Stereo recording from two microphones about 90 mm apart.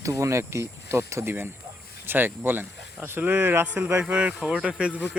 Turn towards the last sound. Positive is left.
turn(degrees=-10)  # may be behind; listen again after turning